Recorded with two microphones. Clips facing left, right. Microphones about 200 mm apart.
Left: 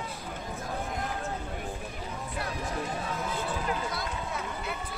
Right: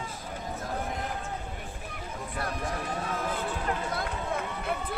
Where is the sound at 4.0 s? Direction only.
55° right (ahead or behind).